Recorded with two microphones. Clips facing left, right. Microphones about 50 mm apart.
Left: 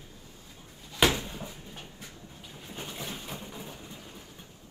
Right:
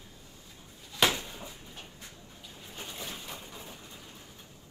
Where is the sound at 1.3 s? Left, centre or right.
Centre.